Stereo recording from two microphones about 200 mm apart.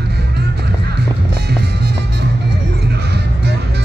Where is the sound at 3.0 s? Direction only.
55° right (ahead or behind).